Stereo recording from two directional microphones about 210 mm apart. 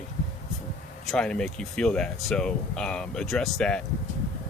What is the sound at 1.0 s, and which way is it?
Speech, 5° left (ahead or behind).